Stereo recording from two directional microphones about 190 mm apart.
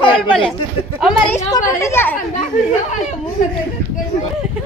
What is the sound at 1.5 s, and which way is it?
Speech, 15° left (ahead or behind).